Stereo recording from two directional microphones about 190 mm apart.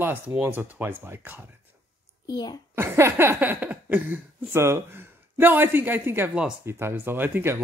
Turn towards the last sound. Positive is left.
turn(degrees=-10)  # may be behind; listen again after turning